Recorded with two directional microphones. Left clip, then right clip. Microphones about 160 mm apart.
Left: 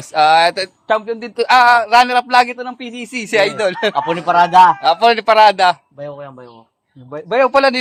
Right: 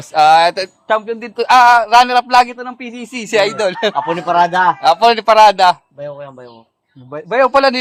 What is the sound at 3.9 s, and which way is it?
Speech, 90° left.